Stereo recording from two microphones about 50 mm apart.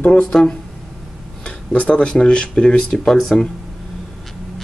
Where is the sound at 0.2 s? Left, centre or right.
Centre.